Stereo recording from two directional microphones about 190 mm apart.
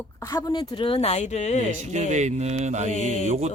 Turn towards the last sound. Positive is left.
turn(degrees=35)  # may be behind; listen again after turning